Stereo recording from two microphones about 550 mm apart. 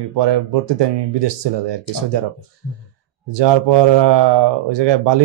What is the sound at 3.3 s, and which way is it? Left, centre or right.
Speech, right.